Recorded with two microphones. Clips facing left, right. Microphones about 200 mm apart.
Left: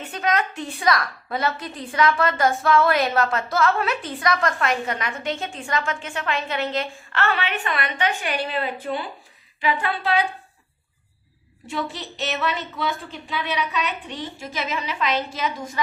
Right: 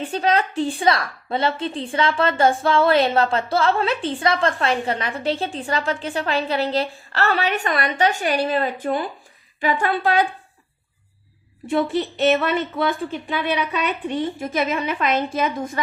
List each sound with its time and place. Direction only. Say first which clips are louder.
0.0 s a woman's voice: right 4 dB; 30° right (ahead or behind); by 10.2 s 50° right (ahead or behind)
11.7 s a woman's voice: right 9 dB; 55° right (ahead or behind)